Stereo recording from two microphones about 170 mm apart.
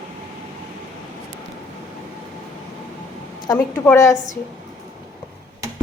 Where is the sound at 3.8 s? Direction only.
20° left (ahead or behind).